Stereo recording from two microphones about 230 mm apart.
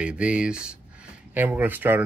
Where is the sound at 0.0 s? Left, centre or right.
Centre.